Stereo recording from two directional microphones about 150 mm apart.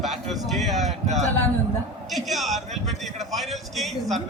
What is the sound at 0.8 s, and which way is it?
Speech, 50° right (ahead or behind).